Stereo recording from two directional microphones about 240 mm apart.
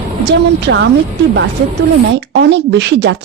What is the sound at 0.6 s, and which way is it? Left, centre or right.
Speech, right.